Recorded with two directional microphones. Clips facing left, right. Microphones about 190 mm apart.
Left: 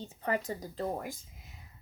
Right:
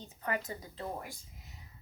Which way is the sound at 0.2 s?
30° left (ahead or behind).